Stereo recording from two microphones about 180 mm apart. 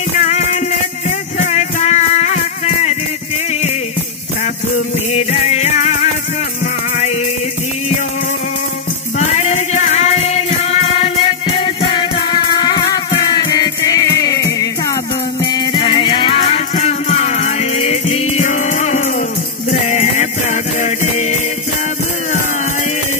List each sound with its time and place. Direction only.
0.1 s music: 40° left (ahead or behind)
4.7 s music: 35° left (ahead or behind)
9.2 s music: 40° left (ahead or behind)